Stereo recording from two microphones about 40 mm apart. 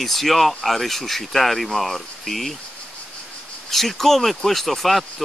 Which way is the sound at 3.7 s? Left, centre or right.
Centre.